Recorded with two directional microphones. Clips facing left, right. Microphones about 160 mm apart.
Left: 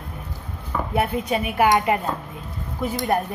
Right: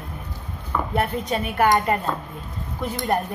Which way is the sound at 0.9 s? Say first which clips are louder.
Left 2 dB; 10° left (ahead or behind).